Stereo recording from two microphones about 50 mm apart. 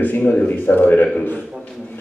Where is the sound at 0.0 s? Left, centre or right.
Left.